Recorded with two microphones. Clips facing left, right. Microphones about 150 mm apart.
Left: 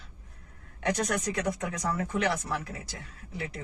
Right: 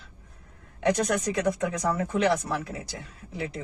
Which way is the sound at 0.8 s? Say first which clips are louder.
Right 5 dB; 30° right (ahead or behind).